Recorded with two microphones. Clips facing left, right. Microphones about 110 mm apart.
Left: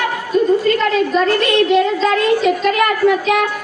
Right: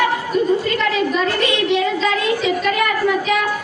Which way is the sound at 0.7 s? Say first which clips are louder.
Left 4 dB; 50° left (ahead or behind).